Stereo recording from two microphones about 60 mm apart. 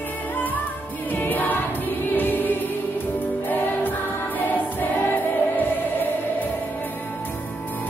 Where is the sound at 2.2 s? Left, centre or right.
Left.